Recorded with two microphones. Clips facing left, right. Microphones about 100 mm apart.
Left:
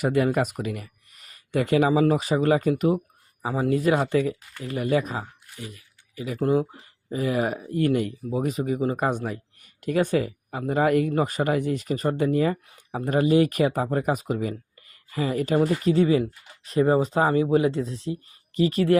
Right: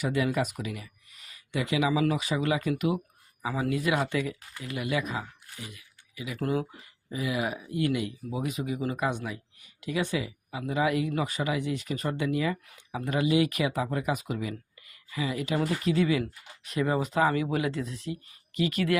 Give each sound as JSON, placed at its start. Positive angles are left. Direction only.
{"t": 0.0, "sound": "speech", "side_deg": 45}